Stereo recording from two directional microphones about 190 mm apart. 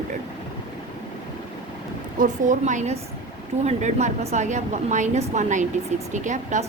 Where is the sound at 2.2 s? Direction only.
40° right (ahead or behind).